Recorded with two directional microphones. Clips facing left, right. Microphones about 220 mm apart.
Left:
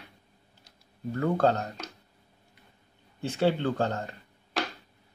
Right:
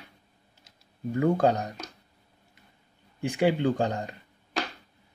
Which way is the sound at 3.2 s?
15° right (ahead or behind).